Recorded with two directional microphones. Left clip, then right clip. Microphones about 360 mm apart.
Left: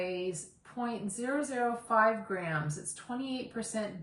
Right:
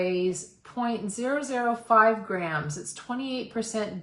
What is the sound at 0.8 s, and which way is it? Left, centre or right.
A woman's voice, centre.